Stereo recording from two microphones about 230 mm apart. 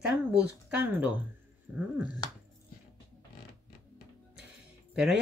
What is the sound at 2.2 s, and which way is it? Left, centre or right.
Speech, centre.